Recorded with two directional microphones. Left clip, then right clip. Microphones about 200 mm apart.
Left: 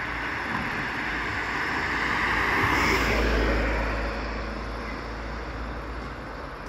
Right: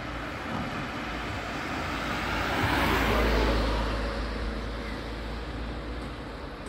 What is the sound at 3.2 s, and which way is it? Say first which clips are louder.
Vehicle: left 1 dB; 40° left (ahead or behind).